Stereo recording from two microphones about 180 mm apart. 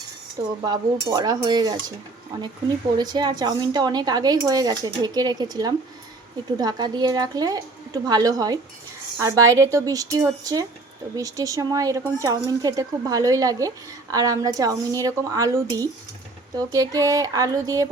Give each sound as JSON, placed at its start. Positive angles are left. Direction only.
{"t": 0.6, "sound": "speech", "side_deg": -20}